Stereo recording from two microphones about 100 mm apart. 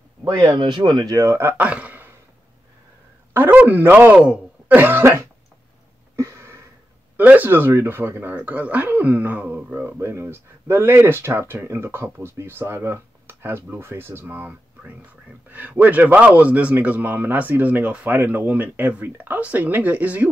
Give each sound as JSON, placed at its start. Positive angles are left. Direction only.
{"t": 0.6, "sound": "speech", "side_deg": -50}
{"t": 1.1, "sound": "speech", "side_deg": -30}
{"t": 1.6, "sound": "a sound", "side_deg": -15}
{"t": 3.3, "sound": "a man's voice", "side_deg": -20}
{"t": 6.1, "sound": "a sound", "side_deg": -30}
{"t": 7.2, "sound": "a man's voice", "side_deg": -15}
{"t": 9.8, "sound": "a man's voice", "side_deg": -25}